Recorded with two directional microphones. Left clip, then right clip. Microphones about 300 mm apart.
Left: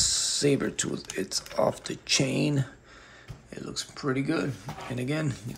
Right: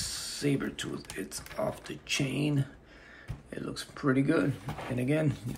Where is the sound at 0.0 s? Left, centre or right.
Centre.